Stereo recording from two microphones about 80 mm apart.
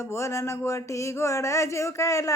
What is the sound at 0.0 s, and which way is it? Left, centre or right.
Music, left.